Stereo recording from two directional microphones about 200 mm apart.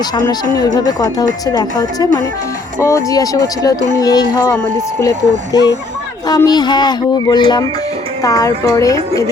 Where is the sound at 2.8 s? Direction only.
15° left (ahead or behind).